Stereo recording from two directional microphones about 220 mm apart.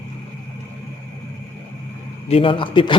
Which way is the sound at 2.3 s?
25° left (ahead or behind).